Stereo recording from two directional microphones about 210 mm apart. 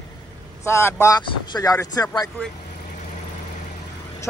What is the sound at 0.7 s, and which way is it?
Speech, 15° left (ahead or behind).